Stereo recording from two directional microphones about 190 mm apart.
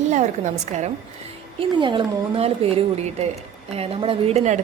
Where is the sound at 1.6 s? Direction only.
25° right (ahead or behind).